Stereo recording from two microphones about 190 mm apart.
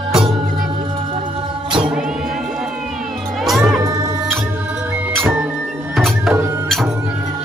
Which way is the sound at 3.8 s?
15° right (ahead or behind).